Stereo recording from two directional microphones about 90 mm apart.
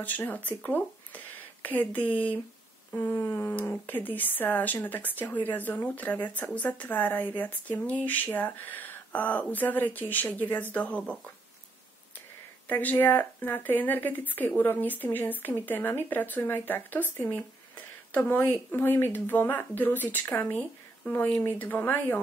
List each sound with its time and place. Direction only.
0.0 s speech: 20° left (ahead or behind)
12.6 s speech: 20° left (ahead or behind)